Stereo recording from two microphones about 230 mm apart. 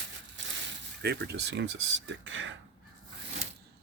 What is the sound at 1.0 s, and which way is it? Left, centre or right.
Speech, right.